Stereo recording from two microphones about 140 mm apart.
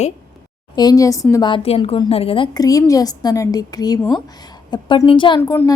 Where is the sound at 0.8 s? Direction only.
25° left (ahead or behind).